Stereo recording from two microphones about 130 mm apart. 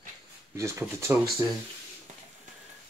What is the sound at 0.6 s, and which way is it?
Speech, 20° right (ahead or behind).